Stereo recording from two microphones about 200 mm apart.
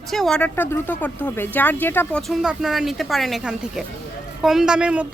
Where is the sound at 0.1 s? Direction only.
Centre (ahead or behind).